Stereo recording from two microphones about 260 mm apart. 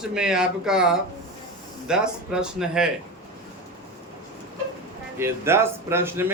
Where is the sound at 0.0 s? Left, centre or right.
Centre.